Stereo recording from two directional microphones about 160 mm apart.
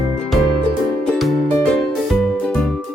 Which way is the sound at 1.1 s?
Centre (ahead or behind).